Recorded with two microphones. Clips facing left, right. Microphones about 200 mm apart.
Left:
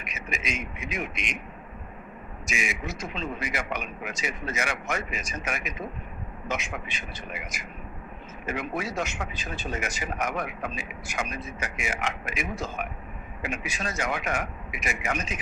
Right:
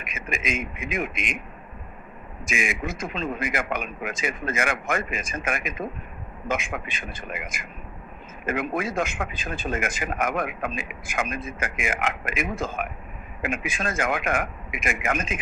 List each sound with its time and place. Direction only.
0.0 s a man's voice: 55° right (ahead or behind)
2.5 s a man's voice: 55° right (ahead or behind)